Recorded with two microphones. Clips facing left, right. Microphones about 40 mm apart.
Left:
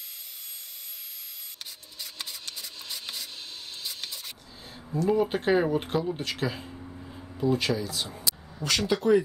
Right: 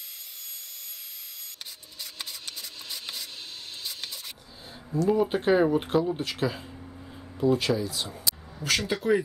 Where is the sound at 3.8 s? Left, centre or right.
Centre.